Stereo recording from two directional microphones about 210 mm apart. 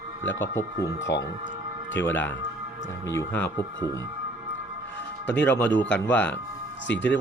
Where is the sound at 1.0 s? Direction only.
60° left (ahead or behind).